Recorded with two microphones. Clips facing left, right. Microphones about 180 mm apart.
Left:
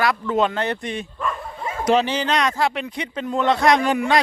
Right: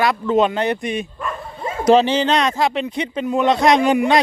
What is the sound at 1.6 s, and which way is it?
Speech, 30° right (ahead or behind).